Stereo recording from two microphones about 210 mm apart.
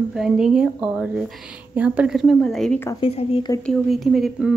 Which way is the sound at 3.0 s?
25° left (ahead or behind).